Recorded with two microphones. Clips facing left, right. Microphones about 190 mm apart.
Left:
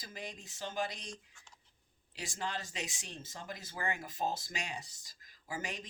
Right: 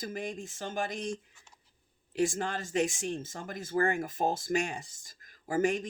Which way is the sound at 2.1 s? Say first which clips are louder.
Right 10 dB; 50° right (ahead or behind).